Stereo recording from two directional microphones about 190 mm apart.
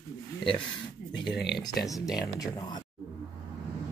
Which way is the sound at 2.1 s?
20° left (ahead or behind).